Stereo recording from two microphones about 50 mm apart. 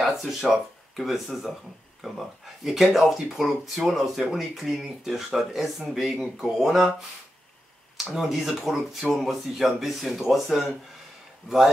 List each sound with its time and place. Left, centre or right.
0.0 s speech: centre
8.0 s speech: centre